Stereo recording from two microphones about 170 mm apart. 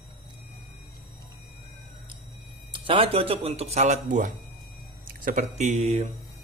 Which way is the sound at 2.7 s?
30° right (ahead or behind).